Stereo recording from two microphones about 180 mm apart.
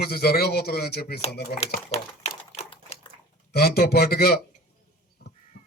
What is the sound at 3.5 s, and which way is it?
Speech, 60° left (ahead or behind).